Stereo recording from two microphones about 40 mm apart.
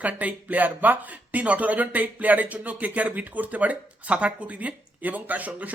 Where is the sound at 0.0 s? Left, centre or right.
Right.